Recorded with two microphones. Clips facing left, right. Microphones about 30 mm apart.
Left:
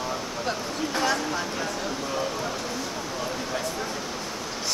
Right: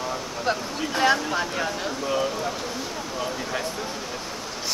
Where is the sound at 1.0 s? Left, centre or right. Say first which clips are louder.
Right 5 dB; right.